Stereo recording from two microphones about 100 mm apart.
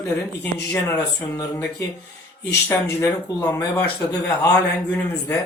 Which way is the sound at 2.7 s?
25° left (ahead or behind).